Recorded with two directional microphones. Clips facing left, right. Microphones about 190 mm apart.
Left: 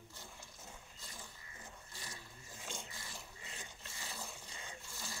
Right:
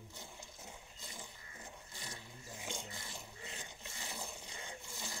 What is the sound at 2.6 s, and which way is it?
Filing, 20° right (ahead or behind).